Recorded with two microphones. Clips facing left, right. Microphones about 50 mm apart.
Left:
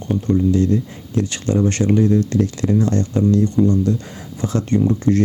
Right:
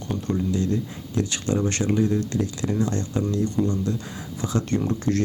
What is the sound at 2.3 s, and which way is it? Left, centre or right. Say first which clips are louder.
Speech: left 7 dB; left.